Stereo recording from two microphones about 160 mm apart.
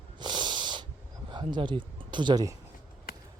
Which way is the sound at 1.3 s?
30° right (ahead or behind).